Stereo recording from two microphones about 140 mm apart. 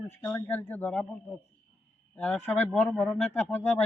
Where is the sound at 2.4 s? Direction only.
15° left (ahead or behind).